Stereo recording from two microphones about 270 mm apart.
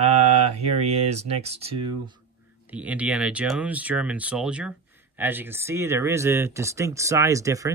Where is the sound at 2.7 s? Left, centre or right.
Centre.